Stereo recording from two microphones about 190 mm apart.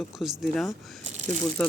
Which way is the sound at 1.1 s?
40° right (ahead or behind).